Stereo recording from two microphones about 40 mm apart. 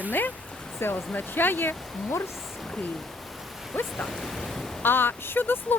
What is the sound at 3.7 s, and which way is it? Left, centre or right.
Rain, left.